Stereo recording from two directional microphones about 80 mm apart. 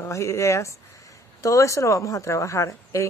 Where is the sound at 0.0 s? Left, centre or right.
Left.